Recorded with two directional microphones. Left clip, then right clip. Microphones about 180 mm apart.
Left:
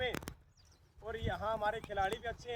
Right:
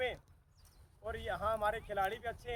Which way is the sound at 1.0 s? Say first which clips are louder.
Right 1 dB; 5° right (ahead or behind).